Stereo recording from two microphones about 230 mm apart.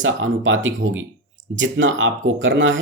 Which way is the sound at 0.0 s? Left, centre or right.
Right.